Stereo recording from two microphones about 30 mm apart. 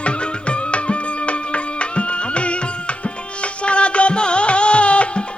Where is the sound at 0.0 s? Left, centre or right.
Left.